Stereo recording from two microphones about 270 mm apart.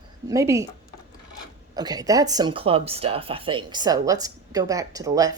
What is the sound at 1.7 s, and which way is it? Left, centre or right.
Speech, centre.